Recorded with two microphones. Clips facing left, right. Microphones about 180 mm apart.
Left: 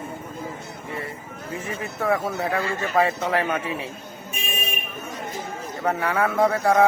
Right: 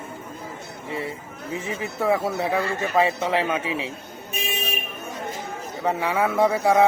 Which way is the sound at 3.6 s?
80° right.